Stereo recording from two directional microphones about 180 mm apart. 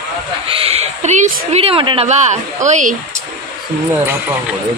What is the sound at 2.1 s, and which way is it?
Speech, 40° right (ahead or behind).